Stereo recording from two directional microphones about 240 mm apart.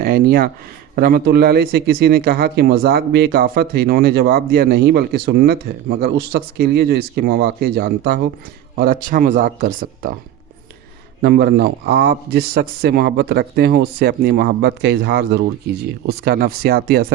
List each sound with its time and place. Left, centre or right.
0.0 s speech: right
11.2 s speech: right